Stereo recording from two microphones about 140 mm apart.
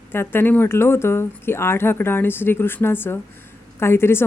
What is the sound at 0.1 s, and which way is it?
Speech, 15° left (ahead or behind).